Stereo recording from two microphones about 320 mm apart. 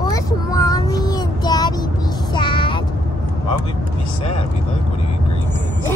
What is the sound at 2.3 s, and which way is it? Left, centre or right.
Child singing, centre.